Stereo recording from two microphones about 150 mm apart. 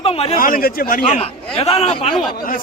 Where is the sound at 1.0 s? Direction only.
40° left (ahead or behind).